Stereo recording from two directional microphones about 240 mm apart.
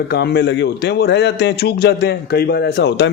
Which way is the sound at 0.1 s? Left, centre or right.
Left.